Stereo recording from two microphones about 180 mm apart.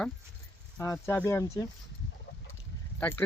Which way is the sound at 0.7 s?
15° left (ahead or behind).